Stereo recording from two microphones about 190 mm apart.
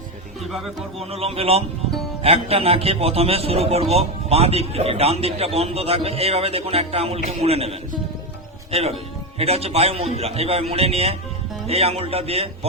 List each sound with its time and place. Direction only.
0.4 s a man's voice: centre (ahead or behind)
1.1 s a man's voice: 30° right (ahead or behind)